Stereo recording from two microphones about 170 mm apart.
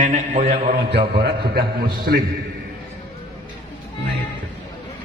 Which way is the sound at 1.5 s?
65° right (ahead or behind).